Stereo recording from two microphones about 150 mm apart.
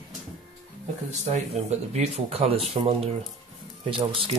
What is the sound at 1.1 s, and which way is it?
Speech, 45° right (ahead or behind).